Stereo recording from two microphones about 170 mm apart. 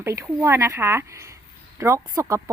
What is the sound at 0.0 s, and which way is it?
Speech, 15° right (ahead or behind).